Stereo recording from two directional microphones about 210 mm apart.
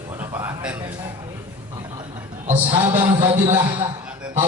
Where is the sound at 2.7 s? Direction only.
20° right (ahead or behind).